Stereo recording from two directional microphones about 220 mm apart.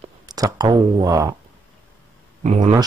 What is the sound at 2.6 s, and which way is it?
Speech, 20° right (ahead or behind).